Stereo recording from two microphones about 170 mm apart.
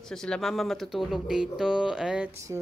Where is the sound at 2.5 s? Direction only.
20° right (ahead or behind).